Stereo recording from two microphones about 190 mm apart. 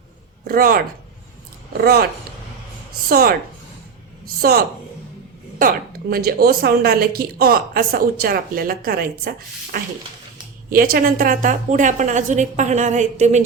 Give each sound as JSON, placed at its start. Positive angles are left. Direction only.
{"t": 0.4, "sound": "a woman's voice", "side_deg": -50}
{"t": 1.8, "sound": "speech", "side_deg": -55}
{"t": 3.1, "sound": "a woman's voice", "side_deg": -50}
{"t": 4.4, "sound": "a woman's voice", "side_deg": -50}